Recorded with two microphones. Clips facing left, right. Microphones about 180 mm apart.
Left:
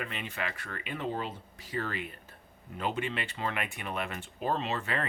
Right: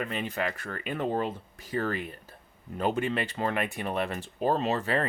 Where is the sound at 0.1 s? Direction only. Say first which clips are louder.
Right 6 dB; 40° right (ahead or behind).